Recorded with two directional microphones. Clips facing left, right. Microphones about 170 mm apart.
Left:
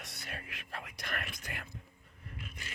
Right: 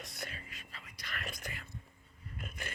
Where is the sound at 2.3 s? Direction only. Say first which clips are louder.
Right 3 dB; 50° right (ahead or behind).